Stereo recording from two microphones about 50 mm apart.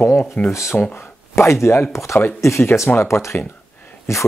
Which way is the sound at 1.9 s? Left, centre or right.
Left.